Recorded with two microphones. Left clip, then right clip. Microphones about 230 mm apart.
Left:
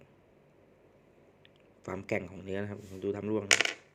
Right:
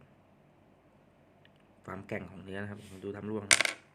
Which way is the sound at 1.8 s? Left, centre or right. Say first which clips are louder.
Left 5 dB; centre.